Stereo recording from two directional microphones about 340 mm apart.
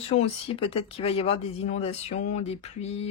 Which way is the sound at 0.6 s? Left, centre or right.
Centre.